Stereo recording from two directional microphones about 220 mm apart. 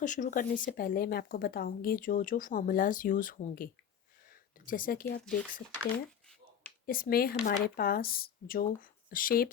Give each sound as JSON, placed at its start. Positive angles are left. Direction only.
{"t": 0.0, "sound": "speech", "side_deg": 35}
{"t": 5.0, "sound": "speech", "side_deg": 5}
{"t": 6.8, "sound": "speech", "side_deg": 40}